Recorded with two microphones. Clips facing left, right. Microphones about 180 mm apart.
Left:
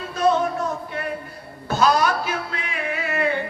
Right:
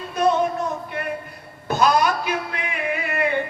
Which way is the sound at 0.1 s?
20° right (ahead or behind).